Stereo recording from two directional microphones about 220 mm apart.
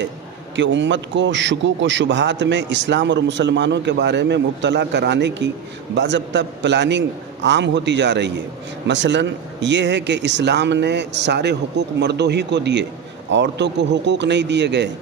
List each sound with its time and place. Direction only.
0.6 s a man's voice: 55° right (ahead or behind)